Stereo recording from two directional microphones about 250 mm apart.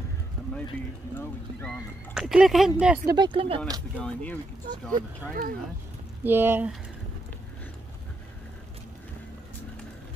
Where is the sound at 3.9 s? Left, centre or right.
Centre.